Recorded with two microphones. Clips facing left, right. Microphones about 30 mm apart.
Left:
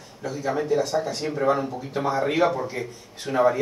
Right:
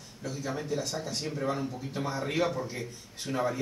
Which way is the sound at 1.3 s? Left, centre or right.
Left.